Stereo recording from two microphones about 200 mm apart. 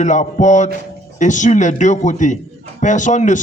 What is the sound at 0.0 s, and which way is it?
A man's voice, 35° left (ahead or behind).